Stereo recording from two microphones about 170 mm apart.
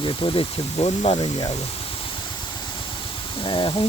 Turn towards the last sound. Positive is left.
turn(degrees=30)  # may be behind; listen again after turning